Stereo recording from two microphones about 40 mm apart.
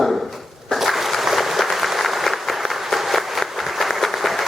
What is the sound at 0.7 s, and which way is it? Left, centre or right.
Applause, centre.